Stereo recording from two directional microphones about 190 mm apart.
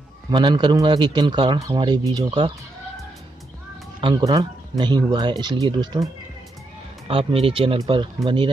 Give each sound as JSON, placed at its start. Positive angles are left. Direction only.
{"t": 0.3, "sound": "speech", "side_deg": -25}
{"t": 4.0, "sound": "speech", "side_deg": -20}
{"t": 7.1, "sound": "speech", "side_deg": -30}